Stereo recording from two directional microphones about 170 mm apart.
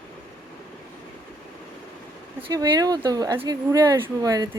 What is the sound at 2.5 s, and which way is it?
Speech, 20° right (ahead or behind).